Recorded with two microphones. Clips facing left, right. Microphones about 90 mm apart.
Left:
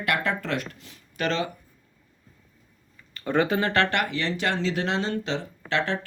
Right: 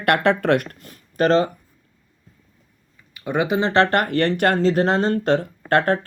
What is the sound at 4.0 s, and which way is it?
Speech, 55° right (ahead or behind).